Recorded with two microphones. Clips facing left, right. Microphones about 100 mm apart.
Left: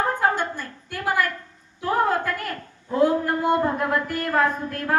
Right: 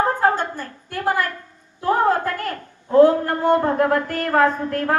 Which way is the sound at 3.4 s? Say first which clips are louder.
Right 8 dB; 30° right (ahead or behind).